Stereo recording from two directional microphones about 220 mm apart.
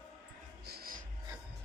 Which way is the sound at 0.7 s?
45° right (ahead or behind).